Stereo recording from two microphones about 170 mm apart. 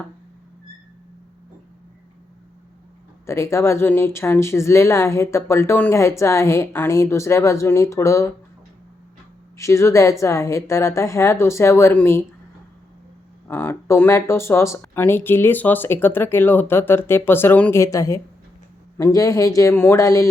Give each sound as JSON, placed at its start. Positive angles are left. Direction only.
{"t": 3.2, "sound": "speech", "side_deg": 15}
{"t": 9.6, "sound": "speech", "side_deg": 15}
{"t": 13.5, "sound": "a man's voice", "side_deg": 15}